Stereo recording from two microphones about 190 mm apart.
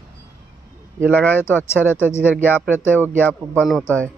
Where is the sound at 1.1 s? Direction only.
10° left (ahead or behind).